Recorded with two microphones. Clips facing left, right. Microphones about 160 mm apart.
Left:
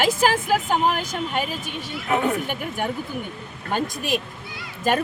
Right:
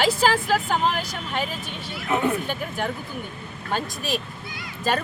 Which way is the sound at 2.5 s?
15° left (ahead or behind).